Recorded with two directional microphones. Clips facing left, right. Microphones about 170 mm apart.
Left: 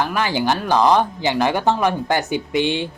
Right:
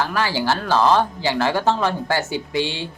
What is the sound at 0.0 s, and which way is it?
Speech, 20° left (ahead or behind).